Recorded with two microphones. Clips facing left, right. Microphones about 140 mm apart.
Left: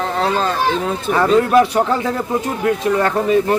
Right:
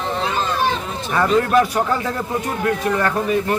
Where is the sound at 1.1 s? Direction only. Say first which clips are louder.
Left 3 dB; 10° left (ahead or behind).